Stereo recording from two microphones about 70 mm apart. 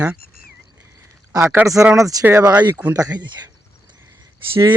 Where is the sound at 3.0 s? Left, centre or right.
Right.